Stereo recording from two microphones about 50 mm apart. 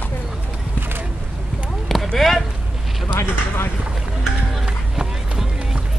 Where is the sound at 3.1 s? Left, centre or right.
Left.